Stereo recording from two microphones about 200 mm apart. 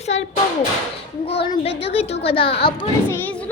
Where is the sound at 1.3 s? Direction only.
25° left (ahead or behind).